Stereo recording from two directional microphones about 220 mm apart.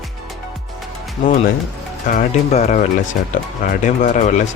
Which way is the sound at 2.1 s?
30° left (ahead or behind).